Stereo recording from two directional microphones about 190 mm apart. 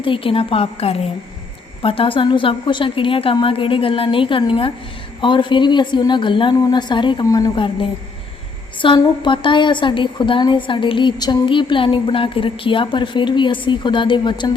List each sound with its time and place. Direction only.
0.0 s a woman's voice: 25° left (ahead or behind)